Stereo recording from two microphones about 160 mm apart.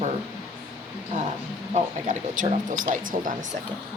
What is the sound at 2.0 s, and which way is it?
Speech, 50° right (ahead or behind).